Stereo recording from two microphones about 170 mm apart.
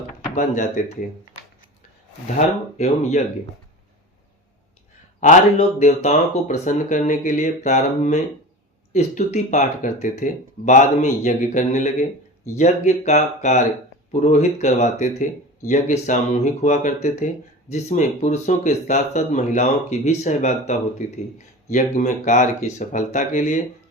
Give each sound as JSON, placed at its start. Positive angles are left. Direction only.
{"t": 0.3, "sound": "speech", "side_deg": 45}
{"t": 2.2, "sound": "speech", "side_deg": 45}
{"t": 5.2, "sound": "speech", "side_deg": 45}